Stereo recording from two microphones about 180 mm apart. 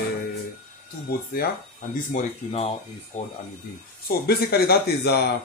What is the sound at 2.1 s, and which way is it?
Speech, 45° left (ahead or behind).